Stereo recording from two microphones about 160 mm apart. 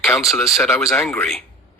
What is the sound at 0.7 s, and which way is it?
Speech, 20° left (ahead or behind).